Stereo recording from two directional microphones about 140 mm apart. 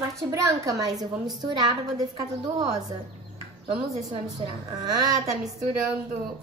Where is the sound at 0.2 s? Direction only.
25° right (ahead or behind).